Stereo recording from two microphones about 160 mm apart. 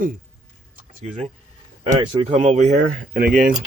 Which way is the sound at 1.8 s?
25° right (ahead or behind).